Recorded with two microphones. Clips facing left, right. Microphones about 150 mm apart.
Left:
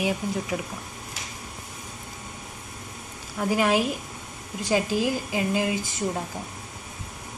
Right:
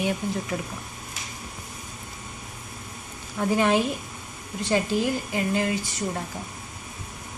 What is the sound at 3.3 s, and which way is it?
Speech, 5° left (ahead or behind).